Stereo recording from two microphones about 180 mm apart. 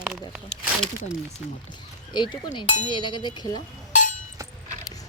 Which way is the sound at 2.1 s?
25° left (ahead or behind).